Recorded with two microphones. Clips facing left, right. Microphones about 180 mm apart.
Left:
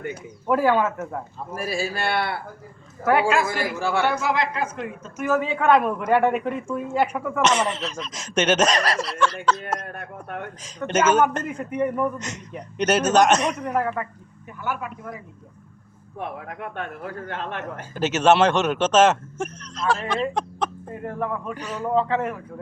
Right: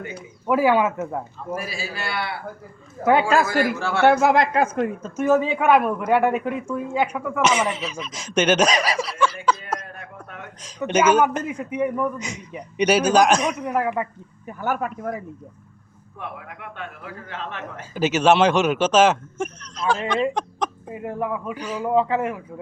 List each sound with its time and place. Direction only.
0.4 s speech: 10° right (ahead or behind)
1.5 s a man's voice: 50° left (ahead or behind)
3.0 s a man's voice: 20° right (ahead or behind)
3.2 s a man's voice: 40° right (ahead or behind)
3.8 s speech: 15° left (ahead or behind)
4.1 s a woman's voice: 55° right (ahead or behind)
5.1 s a man's voice: 25° right (ahead or behind)
5.4 s speech: 15° right (ahead or behind)
9.8 s speech: 55° left (ahead or behind)
10.6 s speech: centre (ahead or behind)
14.4 s a woman's voice: 45° right (ahead or behind)
16.5 s a man's voice: 45° left (ahead or behind)
17.9 s speech: centre (ahead or behind)
20.8 s speech: 10° right (ahead or behind)